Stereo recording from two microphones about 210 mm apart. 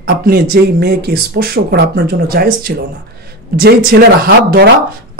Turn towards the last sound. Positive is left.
turn(degrees=-45)  # may be behind; listen again after turning